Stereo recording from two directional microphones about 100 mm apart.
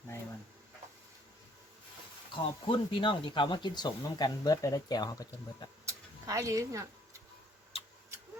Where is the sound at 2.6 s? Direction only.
60° left (ahead or behind); by 5.7 s 40° left (ahead or behind).